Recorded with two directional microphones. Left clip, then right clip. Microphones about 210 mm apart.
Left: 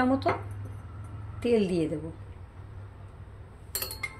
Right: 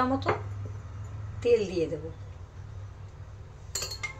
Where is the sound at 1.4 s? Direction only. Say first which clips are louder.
Right 1 dB; 45° left (ahead or behind).